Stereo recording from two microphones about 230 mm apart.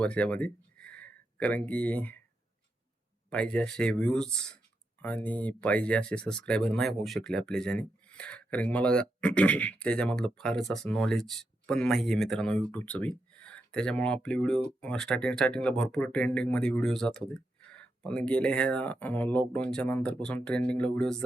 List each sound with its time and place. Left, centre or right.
0.0 s speech: centre
3.2 s speech: centre